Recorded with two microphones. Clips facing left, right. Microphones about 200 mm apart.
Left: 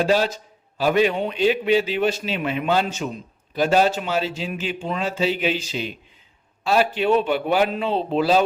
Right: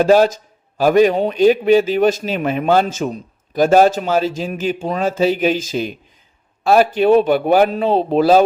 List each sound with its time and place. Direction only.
0.0 s a man's voice: 45° right (ahead or behind)